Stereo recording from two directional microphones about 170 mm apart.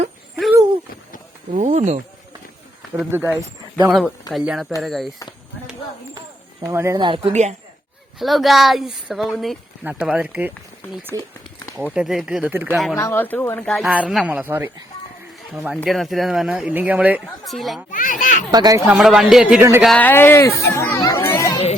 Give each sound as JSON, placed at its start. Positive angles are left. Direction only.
{"t": 1.5, "sound": "speech", "side_deg": -45}
{"t": 3.1, "sound": "speech", "side_deg": -10}
{"t": 6.6, "sound": "speech", "side_deg": -20}
{"t": 8.2, "sound": "speech", "side_deg": 0}
{"t": 11.1, "sound": "speech", "side_deg": -20}
{"t": 11.9, "sound": "speech", "side_deg": 0}
{"t": 13.0, "sound": "speech", "side_deg": 15}
{"t": 13.7, "sound": "speech", "side_deg": 0}
{"t": 15.5, "sound": "speech", "side_deg": 0}
{"t": 17.9, "sound": "children playing", "side_deg": 50}
{"t": 18.5, "sound": "speech", "side_deg": -25}
{"t": 18.9, "sound": "speech", "side_deg": 0}
{"t": 19.8, "sound": "a child's voice", "side_deg": 5}